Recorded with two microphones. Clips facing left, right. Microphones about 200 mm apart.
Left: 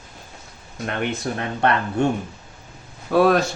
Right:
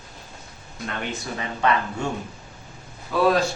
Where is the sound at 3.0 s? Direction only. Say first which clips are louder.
Left 4 dB; 60° left (ahead or behind).